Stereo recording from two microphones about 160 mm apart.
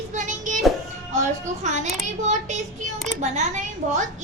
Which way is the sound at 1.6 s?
50° right (ahead or behind).